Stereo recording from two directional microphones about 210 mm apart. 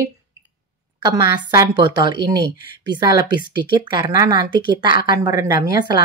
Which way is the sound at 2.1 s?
20° right (ahead or behind).